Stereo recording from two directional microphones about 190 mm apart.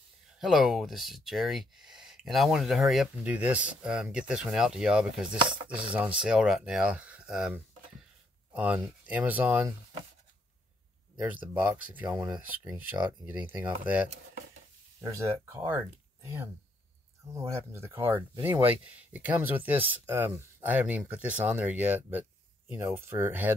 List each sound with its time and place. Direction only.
0.4 s speech: centre (ahead or behind)
5.4 s chopping: 25° right (ahead or behind)
6.2 s speech: 5° right (ahead or behind)
11.2 s speech: 10° right (ahead or behind)